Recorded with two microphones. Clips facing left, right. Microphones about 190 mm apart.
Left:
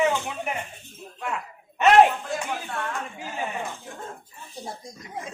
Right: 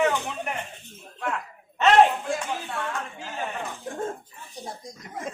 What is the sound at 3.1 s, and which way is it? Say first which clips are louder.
Speech: left 1 dB; 10° left (ahead or behind).